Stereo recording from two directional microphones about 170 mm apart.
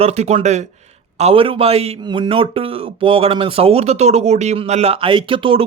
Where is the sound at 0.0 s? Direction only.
40° right (ahead or behind).